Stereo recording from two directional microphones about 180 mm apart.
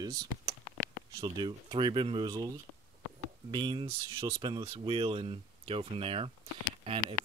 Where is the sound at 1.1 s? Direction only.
25° right (ahead or behind).